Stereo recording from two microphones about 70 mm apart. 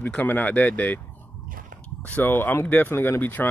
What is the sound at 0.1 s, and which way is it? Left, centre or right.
Speech, left.